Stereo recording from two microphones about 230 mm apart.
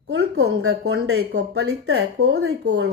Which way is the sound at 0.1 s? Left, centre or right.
Right.